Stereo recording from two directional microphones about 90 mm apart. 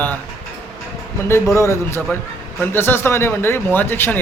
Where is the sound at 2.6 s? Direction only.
25° left (ahead or behind).